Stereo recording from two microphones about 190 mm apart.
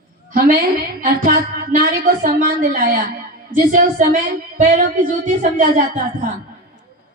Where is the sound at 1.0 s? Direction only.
50° right (ahead or behind).